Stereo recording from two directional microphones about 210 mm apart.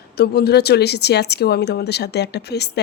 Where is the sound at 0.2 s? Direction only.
50° left (ahead or behind).